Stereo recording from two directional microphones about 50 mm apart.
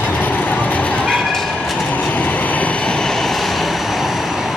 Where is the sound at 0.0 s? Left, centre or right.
Left.